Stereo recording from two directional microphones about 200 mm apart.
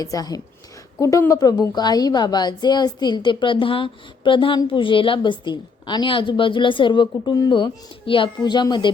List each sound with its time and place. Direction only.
0.0 s a woman's voice: 20° left (ahead or behind)